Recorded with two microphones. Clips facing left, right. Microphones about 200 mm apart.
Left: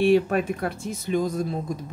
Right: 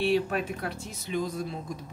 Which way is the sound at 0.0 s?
50° left (ahead or behind).